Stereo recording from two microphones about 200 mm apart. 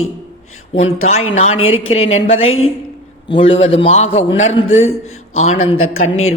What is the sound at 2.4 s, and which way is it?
Speech, 90° left.